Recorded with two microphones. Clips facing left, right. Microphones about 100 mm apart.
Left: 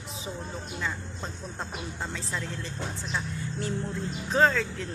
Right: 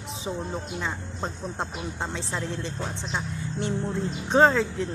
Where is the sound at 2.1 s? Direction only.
30° right (ahead or behind).